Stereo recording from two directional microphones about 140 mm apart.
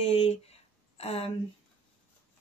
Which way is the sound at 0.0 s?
45° left (ahead or behind).